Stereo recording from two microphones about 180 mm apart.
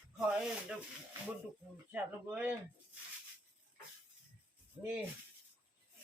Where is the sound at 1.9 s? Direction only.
10° right (ahead or behind).